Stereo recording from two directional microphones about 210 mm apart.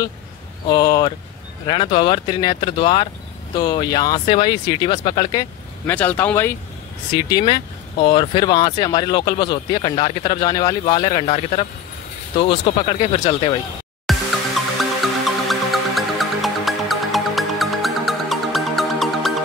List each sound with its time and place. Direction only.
0.7 s speech: 15° left (ahead or behind)
5.9 s speech: 10° left (ahead or behind)
7.2 s speech: 20° left (ahead or behind)
14.1 s music: centre (ahead or behind)